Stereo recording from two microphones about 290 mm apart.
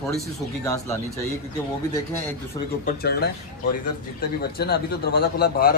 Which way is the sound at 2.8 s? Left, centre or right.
Left.